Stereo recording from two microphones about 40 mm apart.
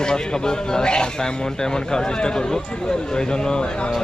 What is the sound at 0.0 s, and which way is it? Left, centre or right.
Speech, centre.